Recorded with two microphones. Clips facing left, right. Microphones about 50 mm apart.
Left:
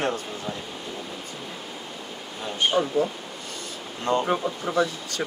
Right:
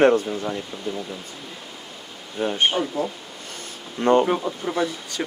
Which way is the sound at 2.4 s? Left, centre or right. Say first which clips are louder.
Right 5 dB; right.